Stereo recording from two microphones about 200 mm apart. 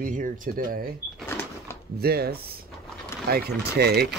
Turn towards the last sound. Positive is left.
turn(degrees=-55)  # may be behind; listen again after turning